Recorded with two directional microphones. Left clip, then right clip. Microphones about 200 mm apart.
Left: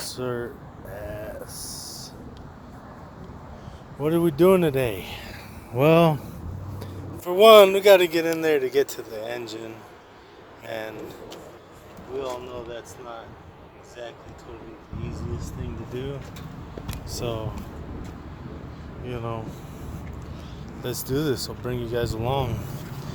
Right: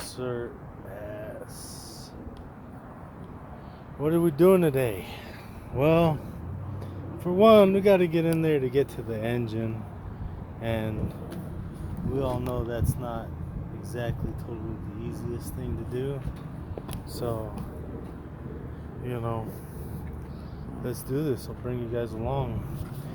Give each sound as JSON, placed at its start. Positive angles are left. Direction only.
{"t": 0.0, "sound": "speech", "side_deg": 35}
{"t": 0.9, "sound": "a sound", "side_deg": 40}
{"t": 4.0, "sound": "speech", "side_deg": 10}
{"t": 5.7, "sound": "speech", "side_deg": 45}
{"t": 7.3, "sound": "speech", "side_deg": 40}
{"t": 8.2, "sound": "speech", "side_deg": 20}
{"t": 12.2, "sound": "speech", "side_deg": -40}
{"t": 15.9, "sound": "speech", "side_deg": -20}
{"t": 19.0, "sound": "speech", "side_deg": -20}
{"t": 20.8, "sound": "speech", "side_deg": 15}